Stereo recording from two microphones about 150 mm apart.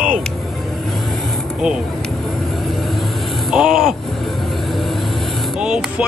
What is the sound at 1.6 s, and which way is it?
Vehicle, centre (ahead or behind).